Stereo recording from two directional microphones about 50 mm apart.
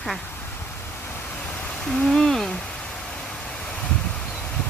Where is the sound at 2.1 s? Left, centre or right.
Centre.